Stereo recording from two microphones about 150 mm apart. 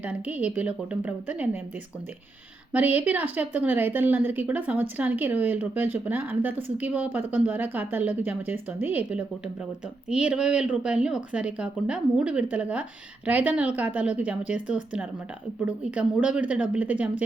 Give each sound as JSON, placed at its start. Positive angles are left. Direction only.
{"t": 0.0, "sound": "a woman's voice", "side_deg": -10}
{"t": 2.7, "sound": "a woman's voice", "side_deg": -10}